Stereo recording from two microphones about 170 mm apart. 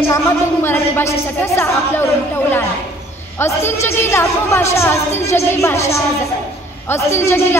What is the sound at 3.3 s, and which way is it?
A woman's voice, 15° left (ahead or behind).